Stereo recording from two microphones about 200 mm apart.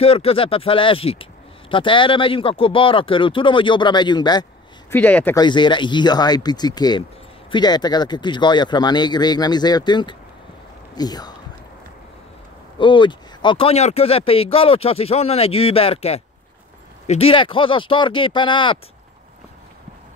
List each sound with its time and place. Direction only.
0.0 s speech: 30° left (ahead or behind)
4.9 s speech: 10° left (ahead or behind)
5.4 s speech: 25° left (ahead or behind)
12.7 s speech: 25° left (ahead or behind)